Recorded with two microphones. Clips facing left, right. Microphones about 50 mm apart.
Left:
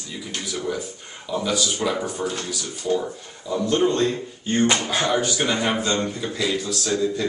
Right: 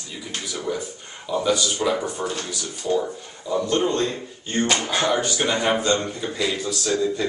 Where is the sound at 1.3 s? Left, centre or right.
Centre.